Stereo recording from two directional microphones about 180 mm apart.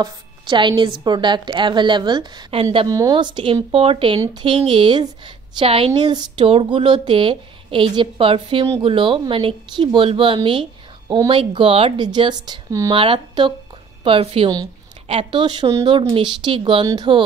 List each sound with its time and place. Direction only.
0.0 s a woman's voice: 25° right (ahead or behind)
2.9 s a woman's voice: 20° right (ahead or behind)